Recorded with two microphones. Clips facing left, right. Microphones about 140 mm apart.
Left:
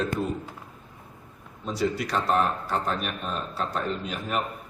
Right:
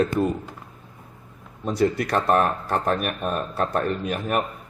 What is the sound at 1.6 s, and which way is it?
Speech, 55° right (ahead or behind).